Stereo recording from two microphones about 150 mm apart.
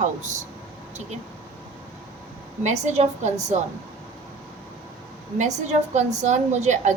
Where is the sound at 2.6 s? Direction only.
50° right (ahead or behind).